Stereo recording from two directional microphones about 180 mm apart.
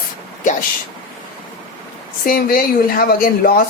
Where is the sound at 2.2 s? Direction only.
55° left (ahead or behind).